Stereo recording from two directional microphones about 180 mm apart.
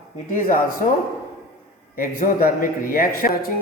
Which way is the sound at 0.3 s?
50° left (ahead or behind).